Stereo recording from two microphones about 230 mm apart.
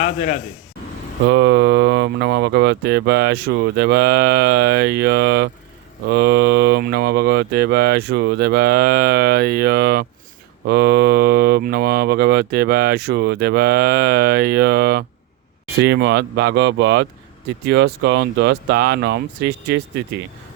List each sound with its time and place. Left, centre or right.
0.0 s speech: left
1.3 s speech: right